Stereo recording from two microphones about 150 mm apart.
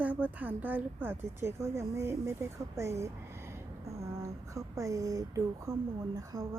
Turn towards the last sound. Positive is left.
turn(degrees=-20)  # may be behind; listen again after turning